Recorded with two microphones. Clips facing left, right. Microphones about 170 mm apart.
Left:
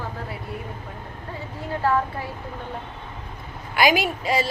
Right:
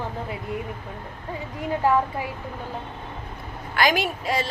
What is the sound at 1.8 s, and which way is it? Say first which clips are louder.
Speech: right 1 dB; 15° right (ahead or behind).